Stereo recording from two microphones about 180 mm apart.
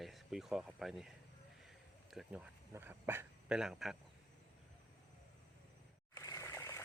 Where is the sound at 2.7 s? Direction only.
15° right (ahead or behind).